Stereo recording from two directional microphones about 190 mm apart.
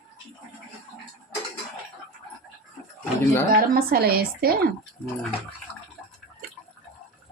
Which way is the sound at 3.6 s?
55° right (ahead or behind).